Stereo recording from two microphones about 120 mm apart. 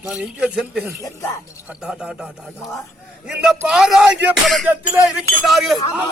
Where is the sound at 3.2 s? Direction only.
5° right (ahead or behind).